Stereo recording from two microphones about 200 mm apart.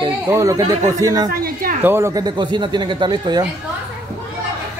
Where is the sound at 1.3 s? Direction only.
45° right (ahead or behind).